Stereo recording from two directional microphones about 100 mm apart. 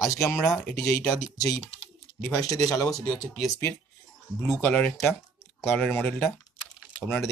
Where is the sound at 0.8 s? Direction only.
30° left (ahead or behind).